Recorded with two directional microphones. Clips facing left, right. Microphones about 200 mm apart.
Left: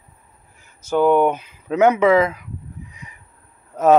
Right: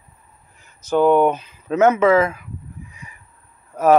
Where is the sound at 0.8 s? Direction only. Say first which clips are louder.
Right 1 dB; 10° left (ahead or behind).